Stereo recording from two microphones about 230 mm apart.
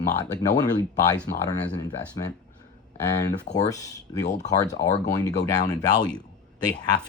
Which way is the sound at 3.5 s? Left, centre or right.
Centre.